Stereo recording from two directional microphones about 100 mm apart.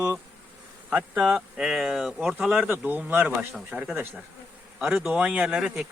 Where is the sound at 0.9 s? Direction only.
15° right (ahead or behind).